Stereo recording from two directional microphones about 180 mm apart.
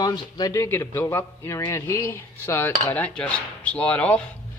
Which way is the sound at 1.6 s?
15° left (ahead or behind).